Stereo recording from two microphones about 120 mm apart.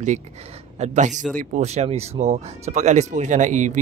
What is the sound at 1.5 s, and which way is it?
Speech, 65° right (ahead or behind).